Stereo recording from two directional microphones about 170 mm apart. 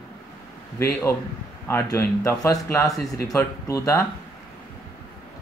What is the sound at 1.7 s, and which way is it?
Speech, 15° left (ahead or behind).